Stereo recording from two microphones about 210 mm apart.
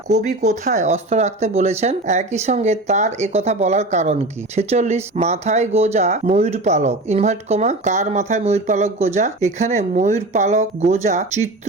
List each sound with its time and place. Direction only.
0.3 s speech: 35° right (ahead or behind)